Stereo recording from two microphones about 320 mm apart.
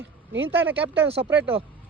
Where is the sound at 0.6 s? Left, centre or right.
Centre.